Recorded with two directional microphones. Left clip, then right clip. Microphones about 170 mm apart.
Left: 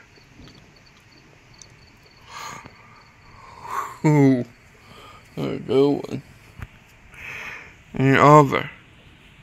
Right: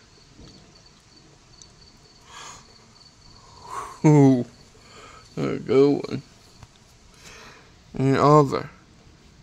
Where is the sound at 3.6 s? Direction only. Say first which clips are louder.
Right 1 dB; 15° right (ahead or behind).